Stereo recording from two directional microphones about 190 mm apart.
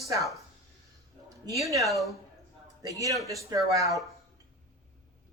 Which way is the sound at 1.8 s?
Centre (ahead or behind).